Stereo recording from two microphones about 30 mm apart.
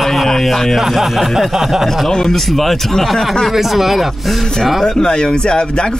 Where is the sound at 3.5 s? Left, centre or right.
Centre.